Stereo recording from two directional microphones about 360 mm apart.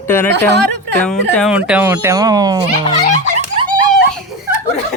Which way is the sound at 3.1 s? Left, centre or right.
Centre.